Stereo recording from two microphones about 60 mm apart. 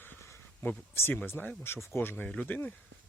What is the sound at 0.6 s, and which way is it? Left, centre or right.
Speech, left.